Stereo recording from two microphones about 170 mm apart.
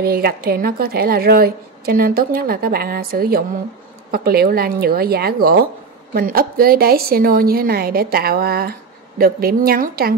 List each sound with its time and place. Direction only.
0.0 s a woman's voice: 65° right (ahead or behind)